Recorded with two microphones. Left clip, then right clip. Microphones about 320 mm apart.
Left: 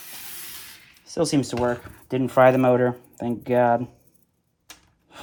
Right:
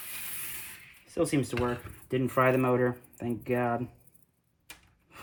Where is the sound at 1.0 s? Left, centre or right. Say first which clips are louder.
Left 6 dB; left.